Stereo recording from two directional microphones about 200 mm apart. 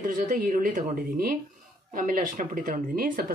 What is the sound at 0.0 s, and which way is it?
Speech, 40° right (ahead or behind).